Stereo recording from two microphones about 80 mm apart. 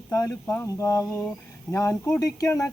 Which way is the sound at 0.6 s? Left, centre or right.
Left.